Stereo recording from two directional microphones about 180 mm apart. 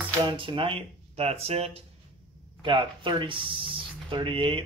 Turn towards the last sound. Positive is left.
turn(degrees=-30)  # may be behind; listen again after turning